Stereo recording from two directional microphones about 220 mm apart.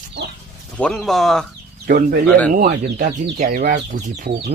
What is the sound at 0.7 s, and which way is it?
Speech, 5° left (ahead or behind).